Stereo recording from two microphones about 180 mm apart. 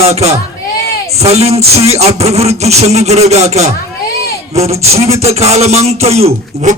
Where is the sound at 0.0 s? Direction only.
35° right (ahead or behind).